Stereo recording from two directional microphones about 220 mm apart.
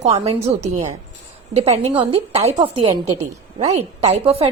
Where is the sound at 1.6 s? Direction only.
25° right (ahead or behind).